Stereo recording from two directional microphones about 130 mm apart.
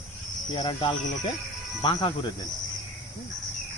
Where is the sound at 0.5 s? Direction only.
40° left (ahead or behind).